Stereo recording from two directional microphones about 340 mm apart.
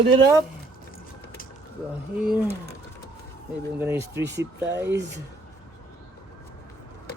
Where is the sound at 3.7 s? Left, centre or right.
Centre.